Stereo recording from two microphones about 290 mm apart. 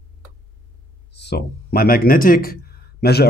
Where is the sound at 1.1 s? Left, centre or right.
Left.